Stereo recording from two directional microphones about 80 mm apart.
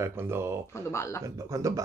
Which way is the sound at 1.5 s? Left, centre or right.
Right.